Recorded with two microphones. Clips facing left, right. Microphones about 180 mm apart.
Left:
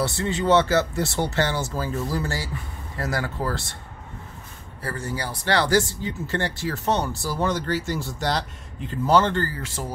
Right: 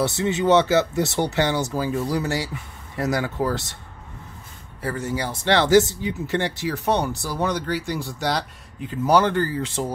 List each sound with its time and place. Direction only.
0.0 s speech: 20° right (ahead or behind)
4.8 s speech: 20° right (ahead or behind)